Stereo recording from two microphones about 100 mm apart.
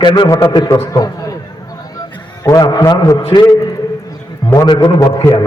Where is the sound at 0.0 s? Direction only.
50° left (ahead or behind).